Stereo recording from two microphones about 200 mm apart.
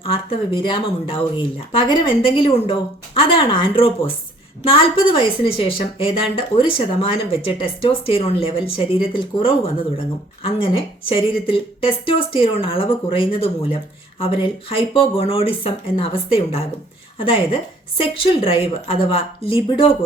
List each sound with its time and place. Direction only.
0.0 s a woman's voice: 25° left (ahead or behind)